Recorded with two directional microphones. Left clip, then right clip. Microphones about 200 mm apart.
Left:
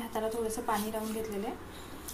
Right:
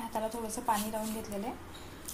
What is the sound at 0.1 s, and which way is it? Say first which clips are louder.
A woman's voice: left 5 dB; 20° right (ahead or behind).